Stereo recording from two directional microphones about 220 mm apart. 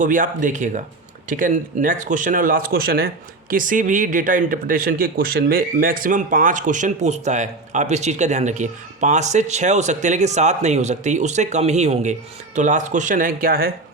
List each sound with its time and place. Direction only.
0.0 s speech: 35° right (ahead or behind)